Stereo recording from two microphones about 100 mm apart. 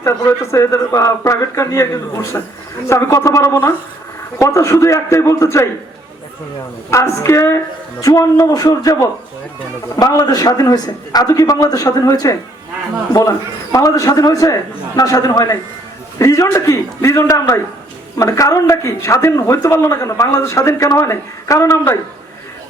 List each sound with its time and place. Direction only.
0.0 s speech: 30° left (ahead or behind)
6.9 s speech: 25° left (ahead or behind)
13.7 s speech: 35° left (ahead or behind)